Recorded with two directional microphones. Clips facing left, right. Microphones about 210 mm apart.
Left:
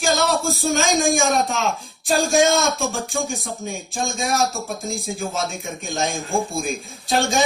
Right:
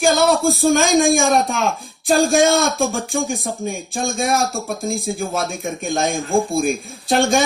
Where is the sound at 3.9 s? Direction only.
50° right (ahead or behind).